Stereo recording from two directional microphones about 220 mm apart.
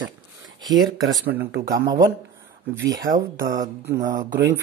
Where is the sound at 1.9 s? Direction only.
15° right (ahead or behind).